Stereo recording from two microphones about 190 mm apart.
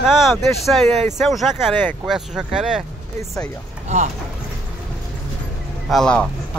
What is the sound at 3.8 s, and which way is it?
Speech, 40° right (ahead or behind).